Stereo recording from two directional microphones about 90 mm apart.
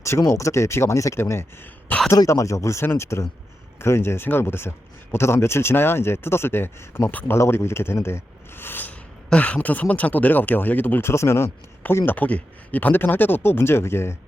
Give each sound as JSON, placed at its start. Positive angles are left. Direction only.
{"t": 0.0, "sound": "speech", "side_deg": 30}
{"t": 11.1, "sound": "speech", "side_deg": 30}